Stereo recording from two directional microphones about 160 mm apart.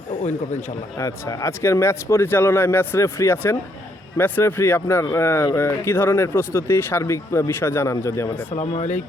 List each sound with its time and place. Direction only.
0.2 s a man's voice: 50° left (ahead or behind)
0.9 s speech: 20° left (ahead or behind)
8.5 s speech: 40° left (ahead or behind)